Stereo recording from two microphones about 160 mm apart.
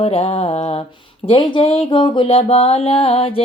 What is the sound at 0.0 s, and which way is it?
Music, 40° left (ahead or behind).